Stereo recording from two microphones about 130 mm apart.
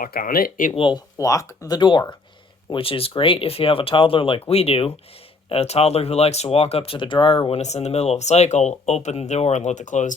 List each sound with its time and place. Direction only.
0.0 s speech: 90° left
1.2 s speech: 25° left (ahead or behind); by 10.2 s 75° left (ahead or behind)